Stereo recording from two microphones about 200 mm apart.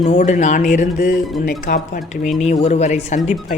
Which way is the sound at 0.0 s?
35° left (ahead or behind).